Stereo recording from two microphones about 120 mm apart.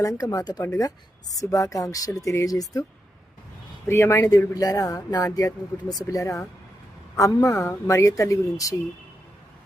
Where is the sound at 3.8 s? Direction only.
20° left (ahead or behind).